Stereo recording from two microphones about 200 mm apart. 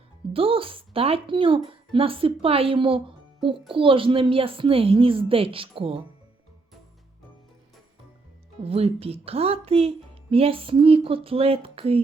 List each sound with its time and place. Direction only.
0.3 s speech: 25° right (ahead or behind)
8.6 s speech: 30° right (ahead or behind)